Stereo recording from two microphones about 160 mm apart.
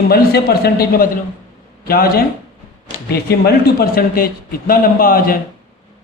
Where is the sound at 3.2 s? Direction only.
85° left; by 5.4 s 65° left (ahead or behind).